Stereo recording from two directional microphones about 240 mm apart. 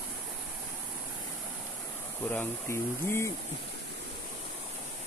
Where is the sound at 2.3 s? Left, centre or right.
Centre.